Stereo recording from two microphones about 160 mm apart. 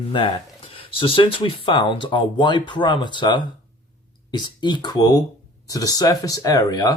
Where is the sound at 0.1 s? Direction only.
30° left (ahead or behind).